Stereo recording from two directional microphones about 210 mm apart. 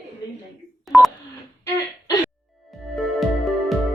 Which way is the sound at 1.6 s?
20° left (ahead or behind).